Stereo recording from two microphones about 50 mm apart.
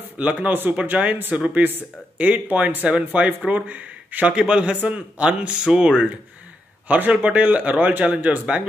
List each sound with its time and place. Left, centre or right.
0.2 s speech: right
4.3 s speech: right